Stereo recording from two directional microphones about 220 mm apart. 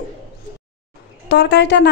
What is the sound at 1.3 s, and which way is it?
Speech, 50° left (ahead or behind).